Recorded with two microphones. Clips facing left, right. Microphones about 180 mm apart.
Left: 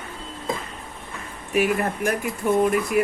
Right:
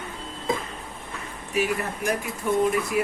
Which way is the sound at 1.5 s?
55° left (ahead or behind).